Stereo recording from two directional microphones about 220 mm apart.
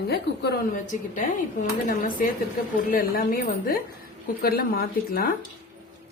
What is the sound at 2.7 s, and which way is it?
A woman's voice, 40° left (ahead or behind).